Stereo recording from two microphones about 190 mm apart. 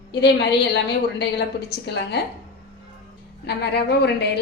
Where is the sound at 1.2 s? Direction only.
60° left (ahead or behind).